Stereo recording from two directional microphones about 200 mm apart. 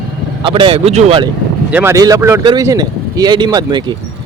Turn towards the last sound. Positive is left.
turn(degrees=-20)  # may be behind; listen again after turning